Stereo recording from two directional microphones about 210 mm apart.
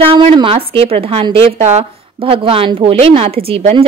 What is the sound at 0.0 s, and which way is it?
Speech, 25° right (ahead or behind).